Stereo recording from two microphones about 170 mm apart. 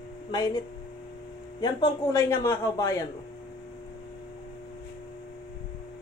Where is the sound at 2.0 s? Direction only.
20° left (ahead or behind).